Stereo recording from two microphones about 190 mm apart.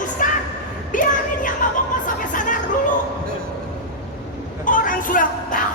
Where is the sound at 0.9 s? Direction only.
45° left (ahead or behind).